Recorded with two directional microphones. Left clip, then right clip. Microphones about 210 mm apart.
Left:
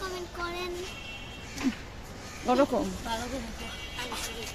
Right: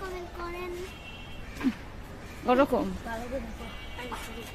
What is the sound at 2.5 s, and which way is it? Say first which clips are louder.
Speech: right 1 dB; centre (ahead or behind).